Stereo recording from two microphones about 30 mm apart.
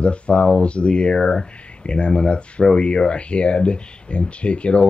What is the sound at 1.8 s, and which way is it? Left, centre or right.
Speech, left.